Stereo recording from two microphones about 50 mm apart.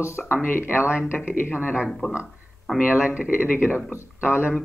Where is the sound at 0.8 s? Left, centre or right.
Right.